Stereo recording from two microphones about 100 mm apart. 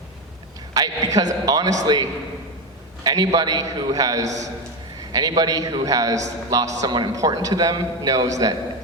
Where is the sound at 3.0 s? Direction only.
40° right (ahead or behind).